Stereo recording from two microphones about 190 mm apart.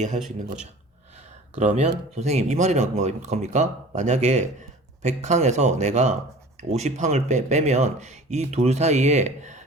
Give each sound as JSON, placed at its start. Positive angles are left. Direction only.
{"t": 1.1, "sound": "a man's voice", "side_deg": -35}